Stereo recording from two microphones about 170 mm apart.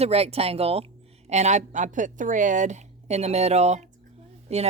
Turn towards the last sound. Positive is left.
turn(degrees=-40)  # may be behind; listen again after turning